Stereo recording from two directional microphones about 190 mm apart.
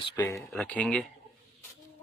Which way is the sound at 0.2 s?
5° left (ahead or behind).